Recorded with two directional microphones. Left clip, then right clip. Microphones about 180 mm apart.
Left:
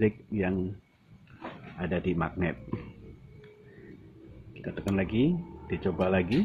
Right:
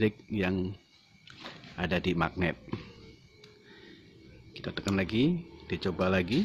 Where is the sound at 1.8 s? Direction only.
40° right (ahead or behind).